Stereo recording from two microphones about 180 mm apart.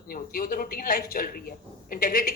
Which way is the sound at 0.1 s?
55° left (ahead or behind).